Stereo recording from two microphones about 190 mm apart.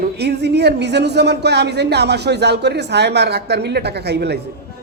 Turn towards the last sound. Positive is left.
turn(degrees=-60)  # may be behind; listen again after turning